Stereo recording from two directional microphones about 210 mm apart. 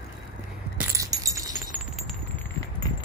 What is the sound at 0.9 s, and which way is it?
Keys jangling, 15° right (ahead or behind).